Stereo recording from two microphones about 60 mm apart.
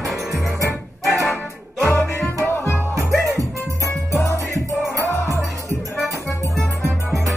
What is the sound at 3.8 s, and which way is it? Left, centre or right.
Music, left.